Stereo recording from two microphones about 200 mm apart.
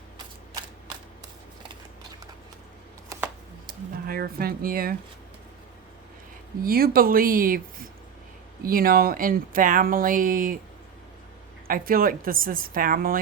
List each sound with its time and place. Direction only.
3.7 s speech: 50° right (ahead or behind)
6.6 s speech: 50° right (ahead or behind)
11.7 s speech: 45° right (ahead or behind)